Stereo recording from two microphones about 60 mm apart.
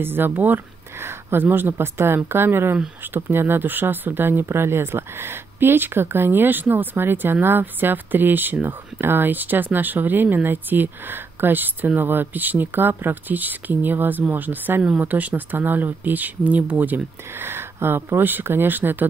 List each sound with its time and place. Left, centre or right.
0.0 s speech: right